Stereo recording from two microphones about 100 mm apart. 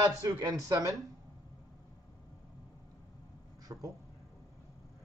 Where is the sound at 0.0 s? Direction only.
45° right (ahead or behind).